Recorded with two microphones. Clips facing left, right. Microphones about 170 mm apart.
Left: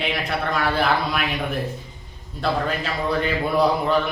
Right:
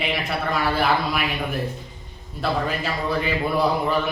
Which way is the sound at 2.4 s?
5° right (ahead or behind).